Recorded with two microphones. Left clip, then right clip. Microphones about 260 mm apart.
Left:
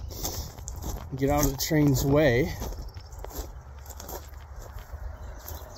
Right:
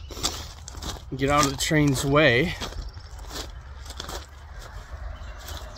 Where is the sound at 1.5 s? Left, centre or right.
Centre.